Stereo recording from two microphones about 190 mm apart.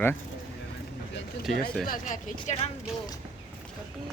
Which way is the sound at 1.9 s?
40° left (ahead or behind).